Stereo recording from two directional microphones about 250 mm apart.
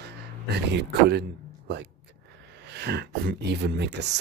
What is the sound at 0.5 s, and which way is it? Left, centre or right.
Speech, right.